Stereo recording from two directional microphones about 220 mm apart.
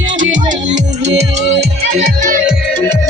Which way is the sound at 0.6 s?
55° right (ahead or behind).